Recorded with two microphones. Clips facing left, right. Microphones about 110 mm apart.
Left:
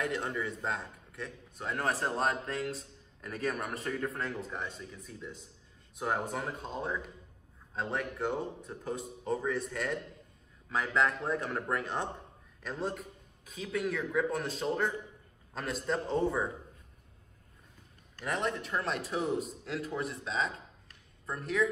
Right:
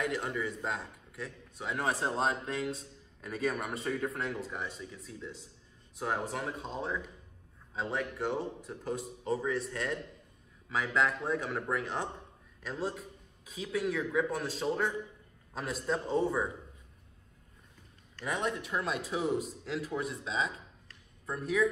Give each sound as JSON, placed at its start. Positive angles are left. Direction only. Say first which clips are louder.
{"t": 0.0, "sound": "speech", "louder": "even", "side_deg": -5}
{"t": 2.0, "sound": "a man's voice", "louder": "even", "side_deg": -15}
{"t": 18.2, "sound": "a man's voice", "louder": "even", "side_deg": -5}